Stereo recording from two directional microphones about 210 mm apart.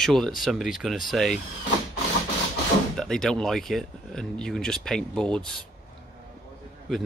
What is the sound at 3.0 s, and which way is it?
Speech, centre (ahead or behind).